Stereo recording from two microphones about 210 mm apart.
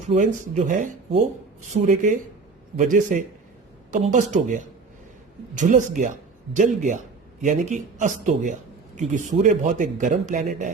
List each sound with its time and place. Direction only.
0.1 s speech: 35° right (ahead or behind)
5.5 s speech: 35° right (ahead or behind)